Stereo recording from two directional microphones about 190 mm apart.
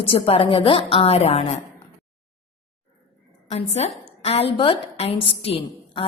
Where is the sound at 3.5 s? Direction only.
35° left (ahead or behind).